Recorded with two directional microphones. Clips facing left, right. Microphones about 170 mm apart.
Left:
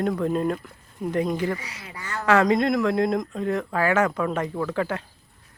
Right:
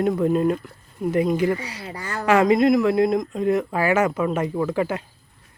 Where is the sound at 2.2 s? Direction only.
10° right (ahead or behind).